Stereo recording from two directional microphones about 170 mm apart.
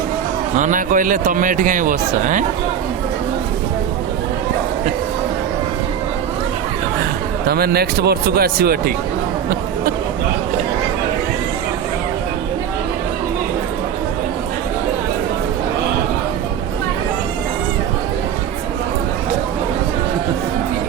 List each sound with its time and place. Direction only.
0.6 s speech: 50° right (ahead or behind)
7.4 s speech: 65° right (ahead or behind)